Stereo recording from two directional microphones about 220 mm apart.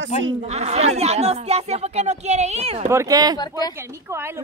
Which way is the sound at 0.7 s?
30° right (ahead or behind).